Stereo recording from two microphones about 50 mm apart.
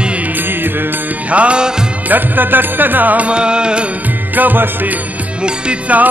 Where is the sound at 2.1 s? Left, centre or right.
Right.